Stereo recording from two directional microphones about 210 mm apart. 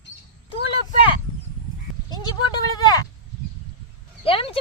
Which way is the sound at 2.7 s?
20° left (ahead or behind).